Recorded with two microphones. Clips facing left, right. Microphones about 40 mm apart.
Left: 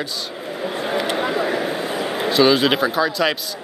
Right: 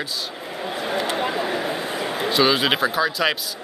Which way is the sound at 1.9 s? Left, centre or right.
Centre.